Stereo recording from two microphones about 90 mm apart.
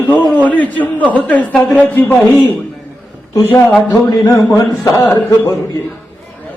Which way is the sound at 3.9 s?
45° left (ahead or behind).